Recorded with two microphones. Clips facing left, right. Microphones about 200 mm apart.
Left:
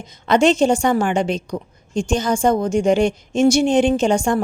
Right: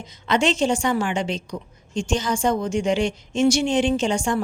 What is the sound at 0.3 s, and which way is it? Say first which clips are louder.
A woman's voice: left 6 dB; 40° left (ahead or behind).